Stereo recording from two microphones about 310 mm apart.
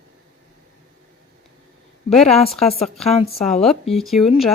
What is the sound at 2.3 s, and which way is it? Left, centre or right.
Speech, centre.